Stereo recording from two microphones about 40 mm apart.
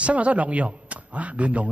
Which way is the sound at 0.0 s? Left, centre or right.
Right.